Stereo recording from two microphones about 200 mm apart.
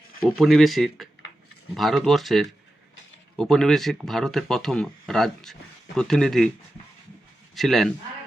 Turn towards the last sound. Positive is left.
turn(degrees=0)  # may be behind; listen again after turning